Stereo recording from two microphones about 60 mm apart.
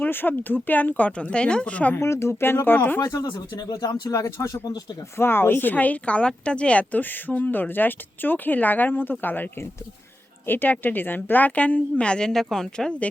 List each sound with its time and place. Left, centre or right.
0.0 s a woman's voice: left
2.0 s speech: left
3.0 s speech: left
5.1 s a woman's voice: left; by 12.9 s centre